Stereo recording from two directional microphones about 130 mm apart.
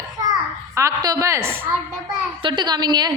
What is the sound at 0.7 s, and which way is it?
Speech, 25° right (ahead or behind).